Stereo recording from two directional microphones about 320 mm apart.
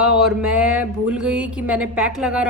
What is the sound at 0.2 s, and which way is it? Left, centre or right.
A woman's voice, centre.